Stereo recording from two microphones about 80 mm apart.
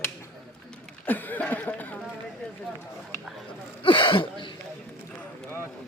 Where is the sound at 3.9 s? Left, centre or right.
Left.